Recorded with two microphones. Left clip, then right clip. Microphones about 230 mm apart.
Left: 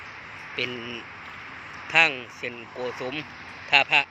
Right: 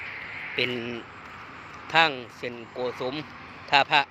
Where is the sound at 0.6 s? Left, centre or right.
Centre.